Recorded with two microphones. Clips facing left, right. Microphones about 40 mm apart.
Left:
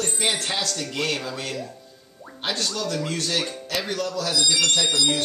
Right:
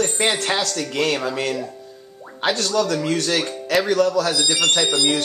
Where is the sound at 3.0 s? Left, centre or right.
Right.